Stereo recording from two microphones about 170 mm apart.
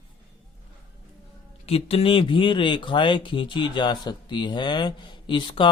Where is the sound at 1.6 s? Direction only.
35° left (ahead or behind).